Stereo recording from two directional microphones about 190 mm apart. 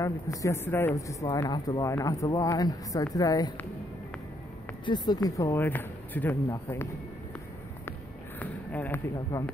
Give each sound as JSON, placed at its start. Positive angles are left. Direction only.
{"t": 0.0, "sound": "speech", "side_deg": 15}
{"t": 4.8, "sound": "speech", "side_deg": 20}
{"t": 8.4, "sound": "speech", "side_deg": 10}